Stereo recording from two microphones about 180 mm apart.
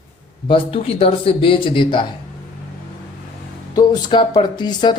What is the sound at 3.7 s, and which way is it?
Speech, 25° left (ahead or behind).